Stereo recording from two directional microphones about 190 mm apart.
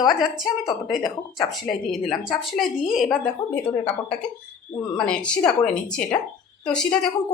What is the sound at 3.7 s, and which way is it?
Speech, 30° left (ahead or behind).